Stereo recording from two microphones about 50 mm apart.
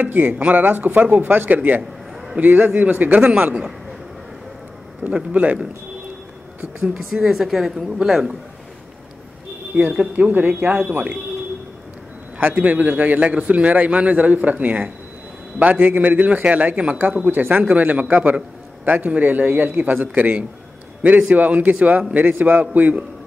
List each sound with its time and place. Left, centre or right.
0.0 s a man's voice: right
3.2 s a man's voice: centre
5.0 s a man's voice: right
7.2 s speech: centre
9.7 s speech: right
10.1 s a man's voice: right
12.4 s a man's voice: right